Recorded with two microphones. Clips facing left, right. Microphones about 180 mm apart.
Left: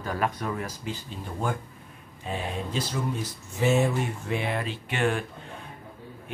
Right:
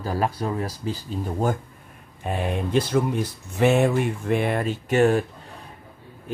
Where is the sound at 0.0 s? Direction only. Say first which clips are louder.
Right 4 dB; 35° right (ahead or behind).